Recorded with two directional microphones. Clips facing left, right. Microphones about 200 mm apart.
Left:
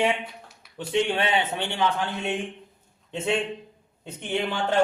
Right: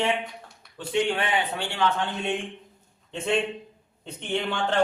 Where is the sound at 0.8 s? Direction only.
25° left (ahead or behind).